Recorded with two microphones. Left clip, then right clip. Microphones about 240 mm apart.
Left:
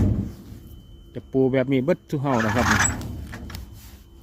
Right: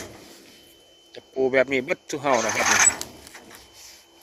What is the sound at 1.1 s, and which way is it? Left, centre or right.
Speech, centre.